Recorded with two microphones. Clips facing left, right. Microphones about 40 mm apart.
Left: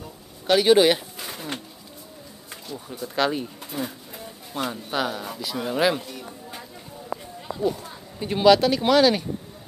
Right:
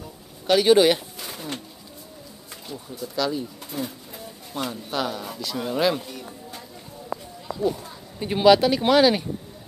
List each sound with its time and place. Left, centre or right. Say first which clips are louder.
0.5 s speech: even; centre
3.2 s speech: left 2 dB; left
3.7 s pigeon: even; centre
4.6 s speech: left 1 dB; centre
8.2 s speech: even; centre